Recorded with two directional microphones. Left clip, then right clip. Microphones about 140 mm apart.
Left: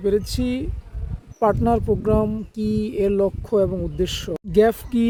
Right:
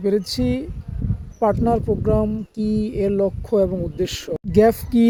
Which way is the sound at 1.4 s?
10° left (ahead or behind).